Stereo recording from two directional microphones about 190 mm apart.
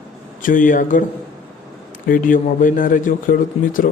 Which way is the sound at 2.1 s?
45° left (ahead or behind).